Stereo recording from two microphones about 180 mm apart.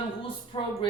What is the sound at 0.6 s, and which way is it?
Speech, 30° left (ahead or behind).